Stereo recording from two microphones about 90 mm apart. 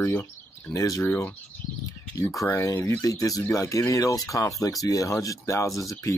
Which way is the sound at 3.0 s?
40° left (ahead or behind).